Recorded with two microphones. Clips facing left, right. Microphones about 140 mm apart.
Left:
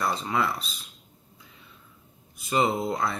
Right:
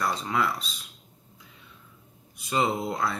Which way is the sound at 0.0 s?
5° left (ahead or behind).